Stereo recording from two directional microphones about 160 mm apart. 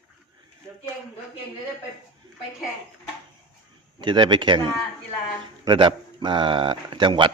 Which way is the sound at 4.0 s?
30° right (ahead or behind).